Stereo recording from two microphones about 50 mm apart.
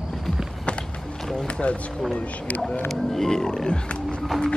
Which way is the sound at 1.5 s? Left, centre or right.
Left.